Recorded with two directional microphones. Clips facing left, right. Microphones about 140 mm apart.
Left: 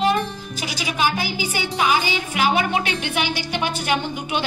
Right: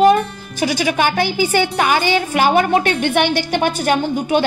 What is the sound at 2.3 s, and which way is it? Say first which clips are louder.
A woman's voice: right 5 dB; 50° right (ahead or behind).